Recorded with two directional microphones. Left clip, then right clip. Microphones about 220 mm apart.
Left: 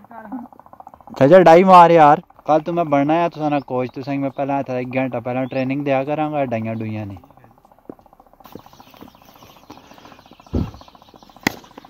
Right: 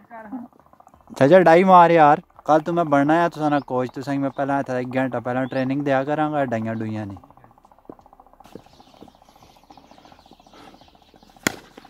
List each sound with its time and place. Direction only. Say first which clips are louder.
1.1 s speech: left 4 dB; centre (ahead or behind)
2.4 s speech: left 1 dB; 15° right (ahead or behind)